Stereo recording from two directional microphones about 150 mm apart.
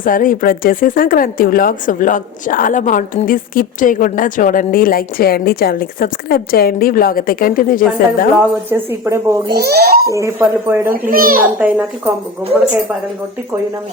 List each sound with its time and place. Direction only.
0.0 s speech: 65° left (ahead or behind)
8.4 s speech: 15° right (ahead or behind)
9.5 s a child's voice: 90° right
10.1 s speech: 20° right (ahead or behind)
11.1 s a child's voice: 70° right (ahead or behind)
11.6 s speech: 10° right (ahead or behind)